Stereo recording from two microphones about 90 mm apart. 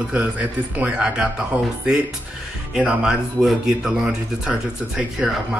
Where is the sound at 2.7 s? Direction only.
10° right (ahead or behind).